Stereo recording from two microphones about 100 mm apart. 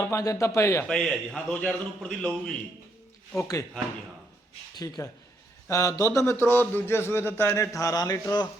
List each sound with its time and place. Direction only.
0.2 s a man's voice: 30° left (ahead or behind)
0.9 s a man's voice: 5° left (ahead or behind)
3.3 s speech: 30° left (ahead or behind)
5.0 s a man's voice: 35° left (ahead or behind)